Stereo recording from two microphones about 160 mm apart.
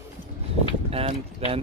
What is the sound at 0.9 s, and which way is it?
Speech, 40° right (ahead or behind).